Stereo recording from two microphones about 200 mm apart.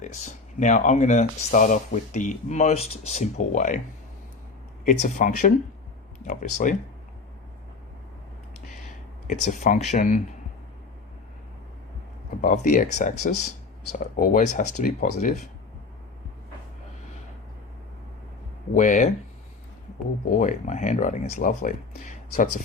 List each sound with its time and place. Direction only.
0.0 s speech: 35° left (ahead or behind)
4.9 s speech: 40° left (ahead or behind)
9.2 s speech: 40° left (ahead or behind)
12.4 s speech: 40° left (ahead or behind)
18.7 s speech: 40° left (ahead or behind)
20.4 s speech: 40° left (ahead or behind)